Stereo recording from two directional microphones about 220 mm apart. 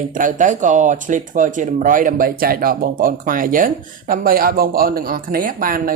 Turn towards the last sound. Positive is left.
turn(degrees=-40)  # may be behind; listen again after turning